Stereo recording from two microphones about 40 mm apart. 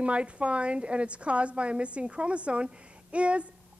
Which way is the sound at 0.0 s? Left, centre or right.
Right.